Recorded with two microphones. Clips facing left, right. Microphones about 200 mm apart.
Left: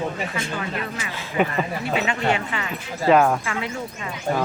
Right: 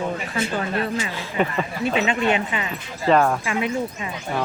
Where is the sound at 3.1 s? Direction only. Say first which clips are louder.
Left 1 dB; 5° left (ahead or behind).